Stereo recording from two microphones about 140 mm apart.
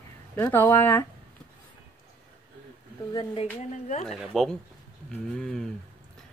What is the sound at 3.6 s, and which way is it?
Speech, 55° left (ahead or behind).